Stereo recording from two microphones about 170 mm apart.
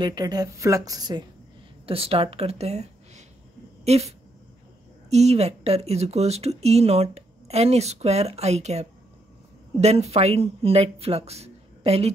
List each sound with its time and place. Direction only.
0.0 s speech: 25° right (ahead or behind)
1.9 s speech: 35° right (ahead or behind)
5.1 s speech: 40° right (ahead or behind)